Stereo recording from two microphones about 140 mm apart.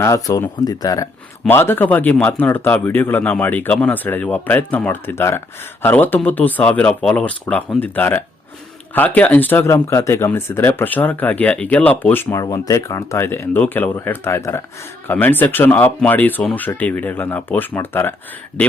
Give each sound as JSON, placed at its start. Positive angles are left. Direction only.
{"t": 0.0, "sound": "speech", "side_deg": 25}